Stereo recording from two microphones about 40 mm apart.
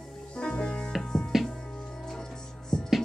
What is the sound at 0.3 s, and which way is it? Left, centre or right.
Music, left.